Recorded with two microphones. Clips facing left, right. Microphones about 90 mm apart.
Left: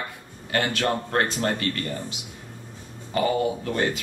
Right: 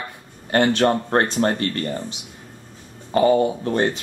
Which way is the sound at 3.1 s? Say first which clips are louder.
Right 6 dB; 35° right (ahead or behind).